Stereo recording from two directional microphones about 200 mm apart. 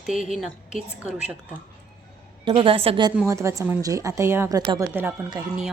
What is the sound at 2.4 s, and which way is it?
Speech, 25° right (ahead or behind).